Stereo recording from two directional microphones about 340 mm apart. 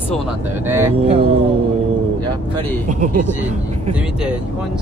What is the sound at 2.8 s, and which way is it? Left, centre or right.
Speech, right.